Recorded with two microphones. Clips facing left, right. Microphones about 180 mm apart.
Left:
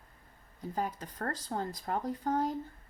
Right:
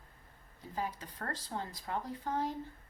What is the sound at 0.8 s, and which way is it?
Speech, 45° left (ahead or behind).